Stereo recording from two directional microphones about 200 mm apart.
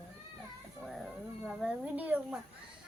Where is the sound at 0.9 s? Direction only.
Centre (ahead or behind).